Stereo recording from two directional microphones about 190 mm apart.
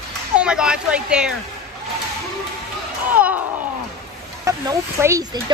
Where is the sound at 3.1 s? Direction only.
10° right (ahead or behind).